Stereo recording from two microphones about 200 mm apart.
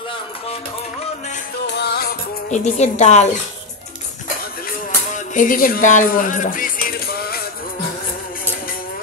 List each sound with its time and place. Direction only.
1.7 s music: 55° left (ahead or behind)
2.5 s a woman's voice: 35° left (ahead or behind)
5.1 s music: 40° left (ahead or behind)